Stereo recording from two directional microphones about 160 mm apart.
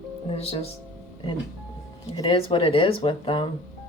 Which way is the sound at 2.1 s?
30° left (ahead or behind).